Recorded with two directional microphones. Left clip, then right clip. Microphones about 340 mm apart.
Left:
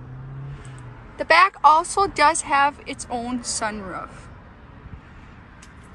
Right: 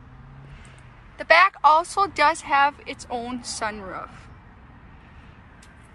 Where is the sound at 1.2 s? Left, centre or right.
Centre.